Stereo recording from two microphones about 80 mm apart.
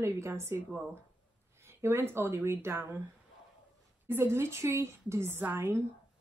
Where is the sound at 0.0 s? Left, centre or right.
Right.